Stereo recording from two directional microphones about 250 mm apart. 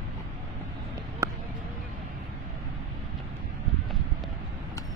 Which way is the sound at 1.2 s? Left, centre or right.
Centre.